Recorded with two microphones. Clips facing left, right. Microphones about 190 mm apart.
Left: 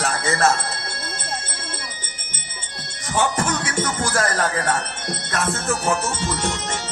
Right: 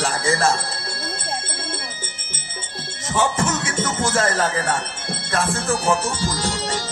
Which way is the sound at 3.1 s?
25° right (ahead or behind).